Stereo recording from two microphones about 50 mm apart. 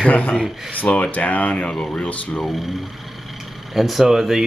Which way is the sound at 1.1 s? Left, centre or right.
Left.